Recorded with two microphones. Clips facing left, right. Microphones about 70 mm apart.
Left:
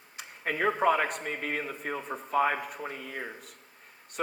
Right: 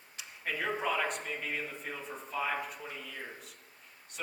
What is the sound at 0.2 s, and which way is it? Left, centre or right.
A man's voice, left.